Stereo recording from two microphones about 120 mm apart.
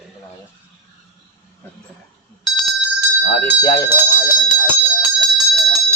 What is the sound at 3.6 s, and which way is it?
Speech, 30° left (ahead or behind).